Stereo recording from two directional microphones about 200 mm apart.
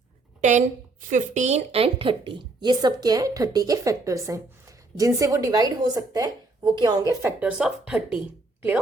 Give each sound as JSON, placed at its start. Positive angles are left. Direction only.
{"t": 0.4, "sound": "a woman's voice", "side_deg": -35}